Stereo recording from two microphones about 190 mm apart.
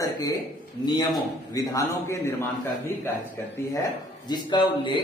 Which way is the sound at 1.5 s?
15° left (ahead or behind).